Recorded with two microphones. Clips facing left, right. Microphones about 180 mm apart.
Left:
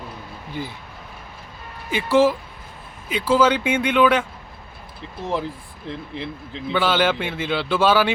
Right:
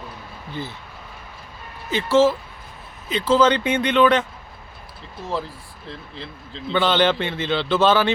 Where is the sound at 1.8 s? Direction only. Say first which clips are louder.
Even; 10° left (ahead or behind).